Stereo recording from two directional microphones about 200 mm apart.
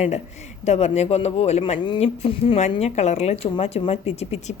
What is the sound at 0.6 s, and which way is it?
A woman's voice, 35° left (ahead or behind).